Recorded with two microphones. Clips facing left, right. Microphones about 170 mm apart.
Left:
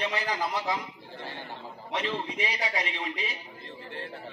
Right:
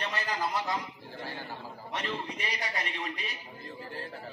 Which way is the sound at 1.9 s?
90° left.